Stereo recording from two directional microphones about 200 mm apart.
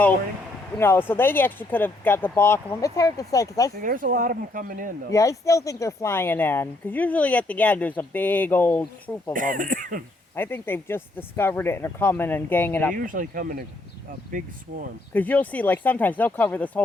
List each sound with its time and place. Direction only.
0.8 s speech: 10° left (ahead or behind)
3.8 s speech: 45° right (ahead or behind)
5.1 s speech: 15° left (ahead or behind)
9.3 s speech: 40° right (ahead or behind)
10.3 s speech: 10° left (ahead or behind)
12.9 s speech: 45° right (ahead or behind)
15.1 s speech: 10° left (ahead or behind)